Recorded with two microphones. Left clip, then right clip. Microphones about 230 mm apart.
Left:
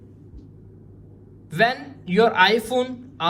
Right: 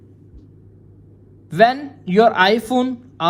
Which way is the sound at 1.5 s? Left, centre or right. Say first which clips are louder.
Right 6 dB; right.